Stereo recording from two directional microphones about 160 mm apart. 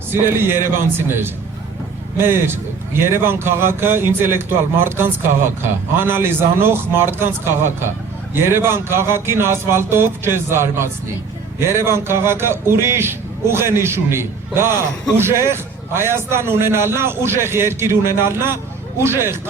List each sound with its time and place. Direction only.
0.1 s a man's voice: 15° right (ahead or behind)